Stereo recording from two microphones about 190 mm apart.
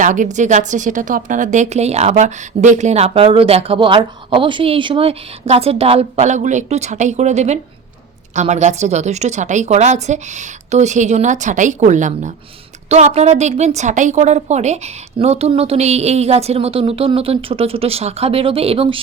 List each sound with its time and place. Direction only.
0.0 s a woman's voice: 40° right (ahead or behind)